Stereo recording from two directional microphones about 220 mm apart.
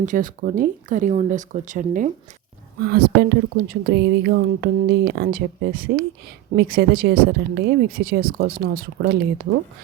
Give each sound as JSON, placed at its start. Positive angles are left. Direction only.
{"t": 0.0, "sound": "speech", "side_deg": -35}